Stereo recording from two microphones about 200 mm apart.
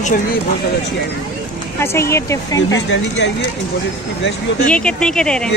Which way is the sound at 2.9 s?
65° left (ahead or behind).